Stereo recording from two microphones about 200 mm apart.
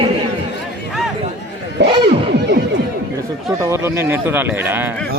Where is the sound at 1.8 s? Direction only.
60° right (ahead or behind).